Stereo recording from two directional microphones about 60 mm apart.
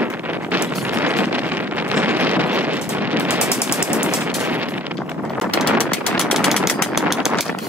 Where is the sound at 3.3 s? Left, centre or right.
Centre.